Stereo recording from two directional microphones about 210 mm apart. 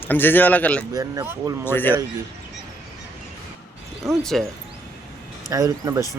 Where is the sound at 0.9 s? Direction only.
15° right (ahead or behind).